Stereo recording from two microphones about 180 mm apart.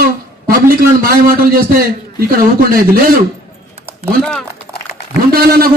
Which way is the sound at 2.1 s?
55° right (ahead or behind).